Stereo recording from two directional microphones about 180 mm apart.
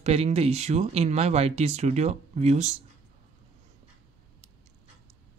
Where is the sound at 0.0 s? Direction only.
35° right (ahead or behind).